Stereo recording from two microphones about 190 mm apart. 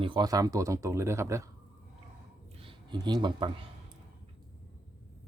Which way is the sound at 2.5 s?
25° right (ahead or behind).